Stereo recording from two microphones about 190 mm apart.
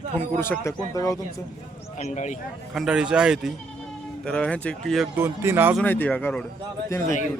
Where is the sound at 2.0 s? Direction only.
40° left (ahead or behind).